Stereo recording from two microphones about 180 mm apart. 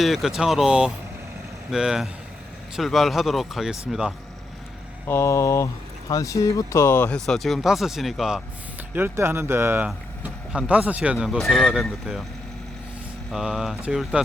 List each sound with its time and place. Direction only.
0.0 s speech: centre (ahead or behind)
5.0 s mantra: 15° left (ahead or behind)
6.1 s speech: 20° left (ahead or behind); by 8.4 s centre (ahead or behind)
9.0 s speech: 10° right (ahead or behind)
13.3 s speech: centre (ahead or behind)